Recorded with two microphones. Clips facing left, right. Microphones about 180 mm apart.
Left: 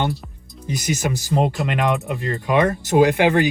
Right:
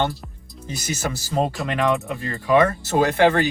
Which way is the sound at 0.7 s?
15° left (ahead or behind).